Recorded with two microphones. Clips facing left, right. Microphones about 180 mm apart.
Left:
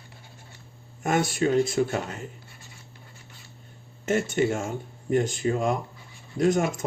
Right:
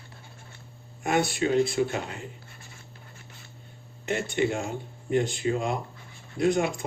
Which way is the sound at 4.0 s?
45° left (ahead or behind).